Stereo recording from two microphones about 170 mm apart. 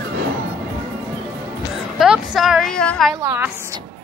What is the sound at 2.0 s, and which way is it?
A woman's voice, centre (ahead or behind).